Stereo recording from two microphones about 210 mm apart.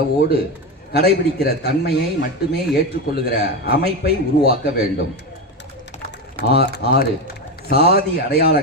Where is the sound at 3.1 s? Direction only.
50° left (ahead or behind).